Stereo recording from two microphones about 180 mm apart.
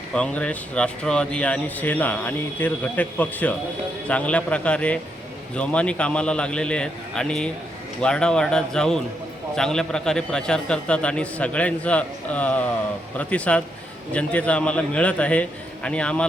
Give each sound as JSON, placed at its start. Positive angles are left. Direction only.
{"t": 0.1, "sound": "a man's voice", "side_deg": 5}